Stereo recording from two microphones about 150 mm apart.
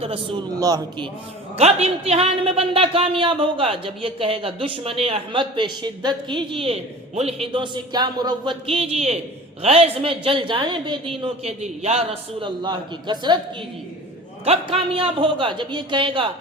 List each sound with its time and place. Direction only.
0.0 s speech: 35° right (ahead or behind)
0.6 s speech: 25° right (ahead or behind)
1.5 s speech: 45° right (ahead or behind)
11.2 s a man's voice: 45° right (ahead or behind)
12.5 s speech: 30° right (ahead or behind)
14.4 s speech: 40° right (ahead or behind)